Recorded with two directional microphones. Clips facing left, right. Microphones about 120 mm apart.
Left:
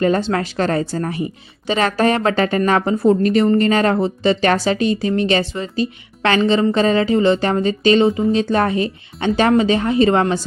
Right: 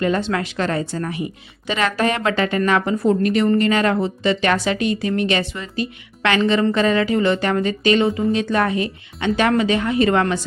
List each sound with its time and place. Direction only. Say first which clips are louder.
0.0 s a woman's voice: left 3 dB; 35° left (ahead or behind)